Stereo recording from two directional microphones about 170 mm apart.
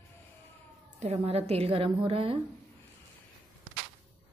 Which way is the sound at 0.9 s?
40° right (ahead or behind).